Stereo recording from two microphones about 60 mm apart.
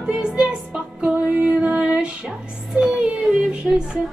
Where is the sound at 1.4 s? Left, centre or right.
Right.